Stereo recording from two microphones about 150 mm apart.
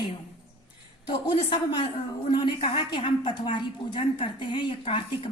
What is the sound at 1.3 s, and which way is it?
Speech, 35° left (ahead or behind).